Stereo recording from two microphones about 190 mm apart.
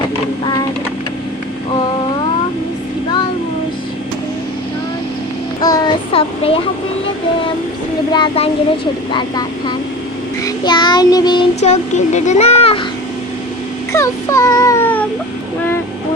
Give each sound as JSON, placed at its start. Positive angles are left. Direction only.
{"t": 5.6, "sound": "child singing", "side_deg": 20}
{"t": 8.1, "sound": "speech", "side_deg": 25}
{"t": 10.4, "sound": "child singing", "side_deg": 20}
{"t": 11.6, "sound": "speech", "side_deg": 40}
{"t": 13.9, "sound": "a sound", "side_deg": 15}